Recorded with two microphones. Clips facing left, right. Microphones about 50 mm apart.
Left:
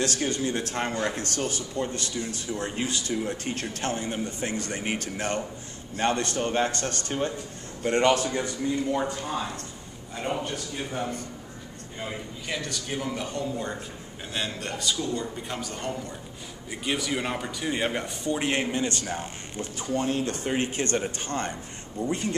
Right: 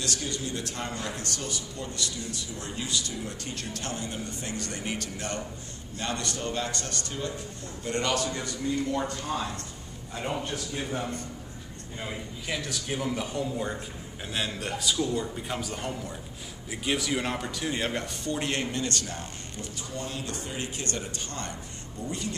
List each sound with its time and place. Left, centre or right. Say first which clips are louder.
0.0 s a man's voice: left 6 dB; left
19.6 s a man's voice: left 9 dB; left